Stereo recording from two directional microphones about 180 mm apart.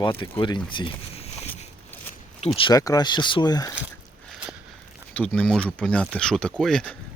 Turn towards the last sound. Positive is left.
turn(degrees=5)  # may be behind; listen again after turning